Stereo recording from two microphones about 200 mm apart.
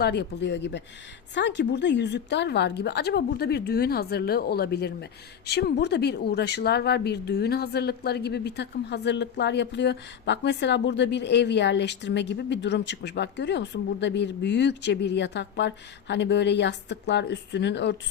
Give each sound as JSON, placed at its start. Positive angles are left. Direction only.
{"t": 0.0, "sound": "speech", "side_deg": 60}